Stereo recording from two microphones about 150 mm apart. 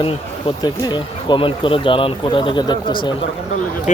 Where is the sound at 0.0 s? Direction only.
35° left (ahead or behind).